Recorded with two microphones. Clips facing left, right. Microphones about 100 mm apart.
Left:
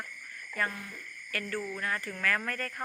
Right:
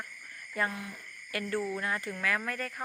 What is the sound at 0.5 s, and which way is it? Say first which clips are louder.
Speech: right 1 dB; 15° right (ahead or behind).